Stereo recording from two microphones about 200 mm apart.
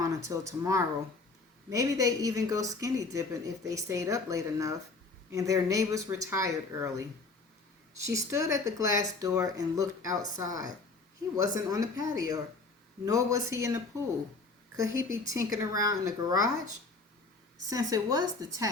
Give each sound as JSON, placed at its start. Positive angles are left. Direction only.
{"t": 0.1, "sound": "a woman's voice", "side_deg": -15}
{"t": 8.0, "sound": "a woman's voice", "side_deg": -15}
{"t": 17.7, "sound": "a woman's voice", "side_deg": -15}